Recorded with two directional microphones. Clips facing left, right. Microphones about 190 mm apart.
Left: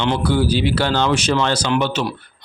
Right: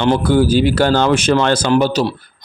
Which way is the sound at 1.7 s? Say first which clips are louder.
Right 5 dB; 40° right (ahead or behind).